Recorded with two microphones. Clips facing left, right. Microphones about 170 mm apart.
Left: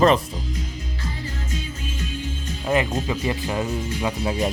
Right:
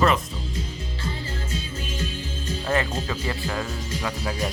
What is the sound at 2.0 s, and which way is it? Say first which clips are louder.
Music: left 1 dB; 30° right (ahead or behind).